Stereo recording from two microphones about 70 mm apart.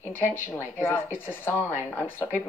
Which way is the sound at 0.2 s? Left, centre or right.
Left.